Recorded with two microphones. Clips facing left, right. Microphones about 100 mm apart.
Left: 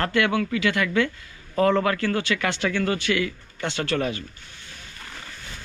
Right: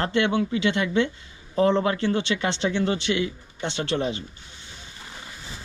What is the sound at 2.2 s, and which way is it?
Speech, 25° right (ahead or behind).